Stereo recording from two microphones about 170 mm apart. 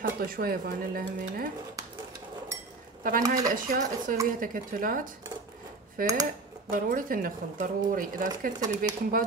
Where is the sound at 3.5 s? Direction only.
55° right (ahead or behind).